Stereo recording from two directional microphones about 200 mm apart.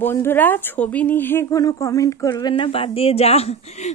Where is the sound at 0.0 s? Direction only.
10° left (ahead or behind).